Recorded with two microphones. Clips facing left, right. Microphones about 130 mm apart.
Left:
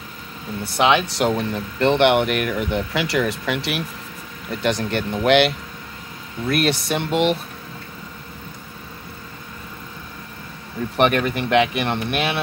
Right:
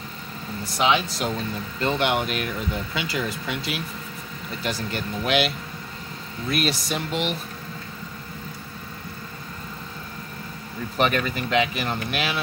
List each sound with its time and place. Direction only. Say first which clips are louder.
0.7 s speech: left 4 dB; 65° left (ahead or behind)
6.5 s speech: left 5 dB; 60° left (ahead or behind)
11.0 s speech: left 5 dB; 60° left (ahead or behind)